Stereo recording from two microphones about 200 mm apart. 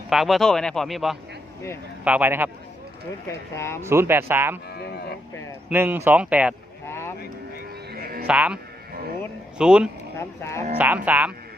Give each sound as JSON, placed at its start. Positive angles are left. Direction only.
{"t": 0.1, "sound": "speech", "side_deg": 0}
{"t": 3.2, "sound": "speech", "side_deg": 15}
{"t": 3.8, "sound": "speech", "side_deg": -10}
{"t": 4.8, "sound": "livestock", "side_deg": 55}
{"t": 5.6, "sound": "speech", "side_deg": -10}
{"t": 6.8, "sound": "vehicle", "side_deg": 10}
{"t": 7.9, "sound": "music", "side_deg": -45}
{"t": 8.3, "sound": "speech", "side_deg": -5}
{"t": 9.6, "sound": "speech", "side_deg": -5}
{"t": 10.2, "sound": "speech", "side_deg": 15}
{"t": 10.8, "sound": "speech", "side_deg": -10}